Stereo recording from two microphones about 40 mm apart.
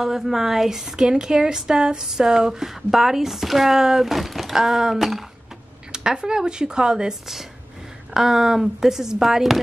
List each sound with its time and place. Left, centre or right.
0.0 s speech: centre
5.9 s speech: right; by 9.6 s centre